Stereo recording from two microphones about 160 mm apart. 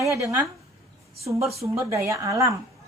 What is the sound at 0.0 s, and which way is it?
Speech, 20° right (ahead or behind).